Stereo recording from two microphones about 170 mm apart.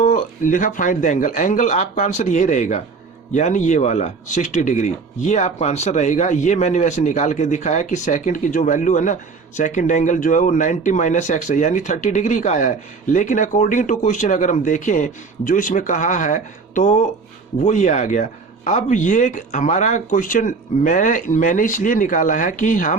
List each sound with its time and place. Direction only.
0.0 s speech: 50° left (ahead or behind)